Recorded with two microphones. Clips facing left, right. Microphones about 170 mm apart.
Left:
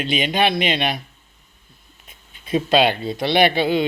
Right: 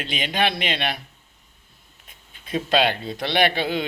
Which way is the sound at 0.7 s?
20° left (ahead or behind).